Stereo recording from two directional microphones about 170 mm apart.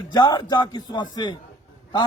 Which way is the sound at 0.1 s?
25° left (ahead or behind).